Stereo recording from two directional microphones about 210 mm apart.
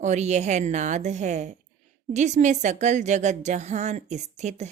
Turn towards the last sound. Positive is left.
turn(degrees=-35)  # may be behind; listen again after turning